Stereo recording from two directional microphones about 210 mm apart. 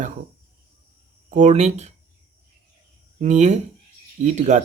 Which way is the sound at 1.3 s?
35° right (ahead or behind).